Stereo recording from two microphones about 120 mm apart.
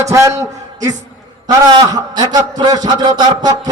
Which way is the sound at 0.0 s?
25° right (ahead or behind).